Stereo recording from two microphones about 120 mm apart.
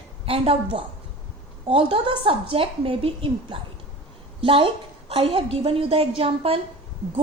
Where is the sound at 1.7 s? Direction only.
50° right (ahead or behind).